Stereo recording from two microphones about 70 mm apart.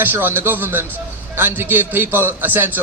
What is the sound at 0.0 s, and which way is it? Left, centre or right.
A man's voice, right.